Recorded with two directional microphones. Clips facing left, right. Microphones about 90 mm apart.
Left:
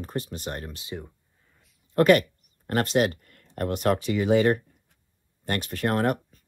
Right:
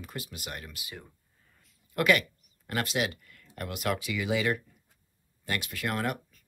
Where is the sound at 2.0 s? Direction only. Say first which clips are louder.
Left 7 dB; 40° left (ahead or behind).